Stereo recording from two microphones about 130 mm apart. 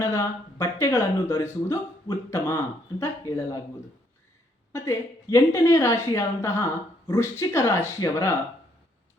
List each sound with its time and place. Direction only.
0.0 s speech: 25° left (ahead or behind)
4.7 s speech: 20° left (ahead or behind)